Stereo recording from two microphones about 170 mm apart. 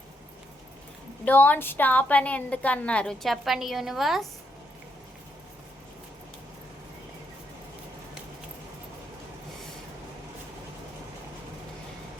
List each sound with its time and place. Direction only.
1.2 s a woman's voice: 10° left (ahead or behind)